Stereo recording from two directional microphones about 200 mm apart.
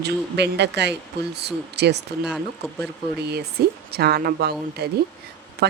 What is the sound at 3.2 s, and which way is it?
Speech, 55° right (ahead or behind).